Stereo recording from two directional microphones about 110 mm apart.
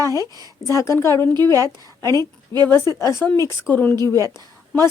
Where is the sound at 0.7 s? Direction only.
25° left (ahead or behind).